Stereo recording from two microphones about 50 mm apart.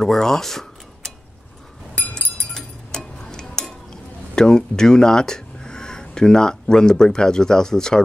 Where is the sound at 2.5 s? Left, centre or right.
Centre.